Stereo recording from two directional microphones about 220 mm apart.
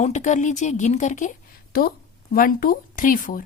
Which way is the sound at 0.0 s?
35° left (ahead or behind).